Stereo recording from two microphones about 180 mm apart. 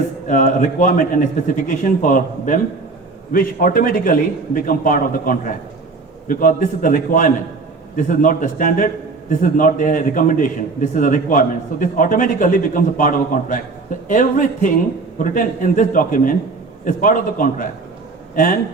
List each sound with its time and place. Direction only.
0.3 s a man's voice: 45° left (ahead or behind)